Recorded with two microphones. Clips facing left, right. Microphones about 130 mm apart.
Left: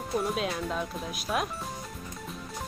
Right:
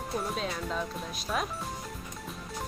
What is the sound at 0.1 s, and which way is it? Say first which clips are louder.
Speech: left 4 dB; 5° left (ahead or behind).